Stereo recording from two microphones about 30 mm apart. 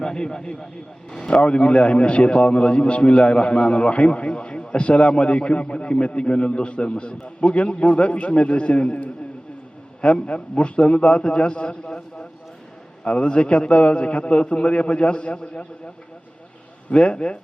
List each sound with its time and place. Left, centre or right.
0.0 s speech: left
1.3 s a man's voice: left
10.0 s a man's voice: left
11.7 s speech: left
13.1 s a man's voice: left
16.9 s a man's voice: left